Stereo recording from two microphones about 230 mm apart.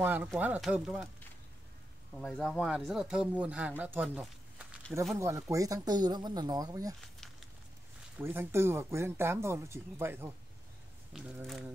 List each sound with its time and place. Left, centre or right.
0.0 s speech: centre
2.1 s speech: centre
8.2 s speech: centre